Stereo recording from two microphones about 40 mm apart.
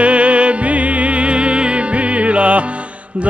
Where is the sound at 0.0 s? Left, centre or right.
Right.